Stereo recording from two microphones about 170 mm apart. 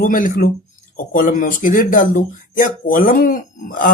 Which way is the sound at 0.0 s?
50° left (ahead or behind).